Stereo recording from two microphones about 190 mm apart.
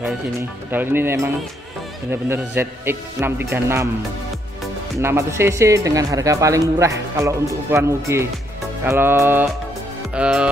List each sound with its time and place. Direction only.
0.7 s speech: 10° right (ahead or behind)
5.0 s speech: 15° right (ahead or behind)
10.1 s music: 5° right (ahead or behind)